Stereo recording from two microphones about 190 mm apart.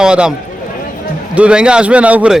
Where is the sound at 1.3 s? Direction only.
5° right (ahead or behind).